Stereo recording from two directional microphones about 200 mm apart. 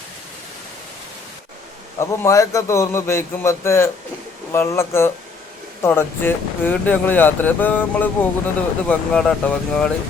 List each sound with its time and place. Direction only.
2.0 s speech: 15° left (ahead or behind)